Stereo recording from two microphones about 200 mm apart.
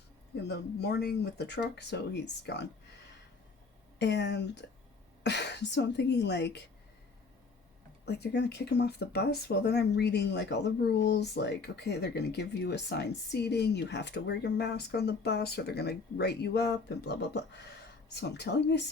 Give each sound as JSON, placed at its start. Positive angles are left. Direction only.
{"t": 0.4, "sound": "speech", "side_deg": 55}
{"t": 3.9, "sound": "speech", "side_deg": 60}
{"t": 8.0, "sound": "speech", "side_deg": 55}